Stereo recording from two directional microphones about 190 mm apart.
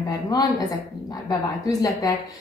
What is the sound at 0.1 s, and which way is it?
Speech, 20° left (ahead or behind).